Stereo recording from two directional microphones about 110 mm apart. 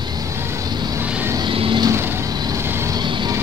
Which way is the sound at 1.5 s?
55° right (ahead or behind).